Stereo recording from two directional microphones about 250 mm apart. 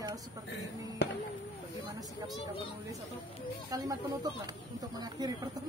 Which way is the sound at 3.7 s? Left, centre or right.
Centre.